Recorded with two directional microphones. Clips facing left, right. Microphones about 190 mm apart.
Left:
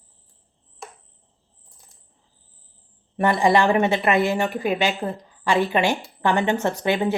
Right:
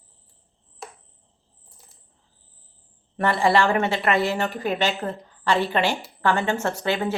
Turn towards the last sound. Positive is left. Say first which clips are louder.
# left 3 dB
turn(degrees=15)  # may be behind; listen again after turning